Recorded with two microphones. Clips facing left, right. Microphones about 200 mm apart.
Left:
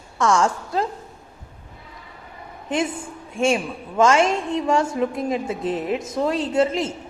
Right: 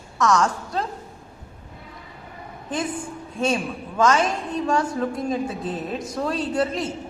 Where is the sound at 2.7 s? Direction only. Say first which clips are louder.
Left 3 dB; 25° left (ahead or behind).